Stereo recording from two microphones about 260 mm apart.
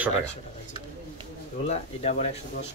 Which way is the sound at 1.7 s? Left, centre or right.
Left.